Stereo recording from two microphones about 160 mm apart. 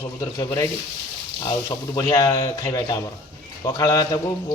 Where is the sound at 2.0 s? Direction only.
20° left (ahead or behind).